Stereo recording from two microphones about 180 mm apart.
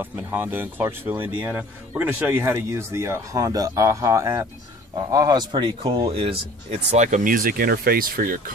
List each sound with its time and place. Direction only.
0.0 s speech: 10° right (ahead or behind); by 8.4 s 50° right (ahead or behind)